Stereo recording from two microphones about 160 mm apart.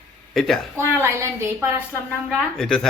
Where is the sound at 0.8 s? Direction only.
15° right (ahead or behind).